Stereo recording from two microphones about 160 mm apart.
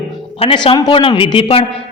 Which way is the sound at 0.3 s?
35° left (ahead or behind).